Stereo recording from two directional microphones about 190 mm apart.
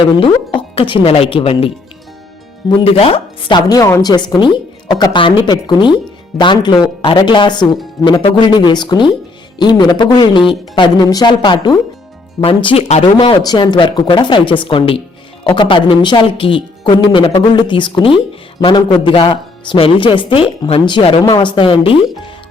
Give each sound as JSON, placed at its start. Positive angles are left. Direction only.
{"t": 0.2, "sound": "speech", "side_deg": 25}